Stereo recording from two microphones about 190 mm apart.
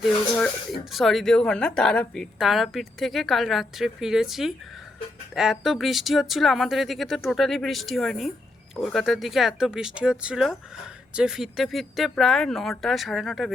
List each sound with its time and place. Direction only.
0.0 s a woman's voice: 5° left (ahead or behind)